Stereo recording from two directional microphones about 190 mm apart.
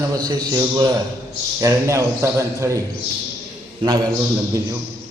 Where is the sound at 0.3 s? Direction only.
20° right (ahead or behind).